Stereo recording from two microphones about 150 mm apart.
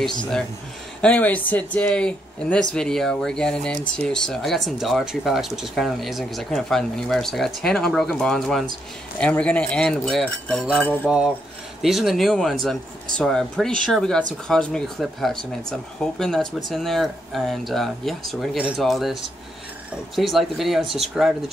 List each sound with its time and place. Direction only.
1.0 s speech: 10° left (ahead or behind)
11.1 s speech: 5° right (ahead or behind)